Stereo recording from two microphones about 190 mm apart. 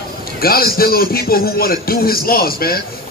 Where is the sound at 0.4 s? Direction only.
50° left (ahead or behind).